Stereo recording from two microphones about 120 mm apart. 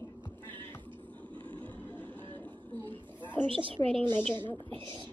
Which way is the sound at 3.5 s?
45° right (ahead or behind).